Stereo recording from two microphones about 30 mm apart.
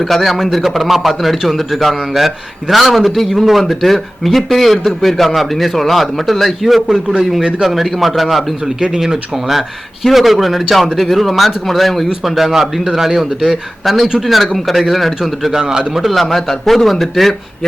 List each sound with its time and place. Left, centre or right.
0.0 s a man's voice: centre
3.2 s a man's voice: centre
3.7 s a man's voice: centre
8.8 s speech: right
9.3 s a man's voice: centre
12.2 s a man's voice: centre
15.7 s speech: right
16.3 s a man's voice: centre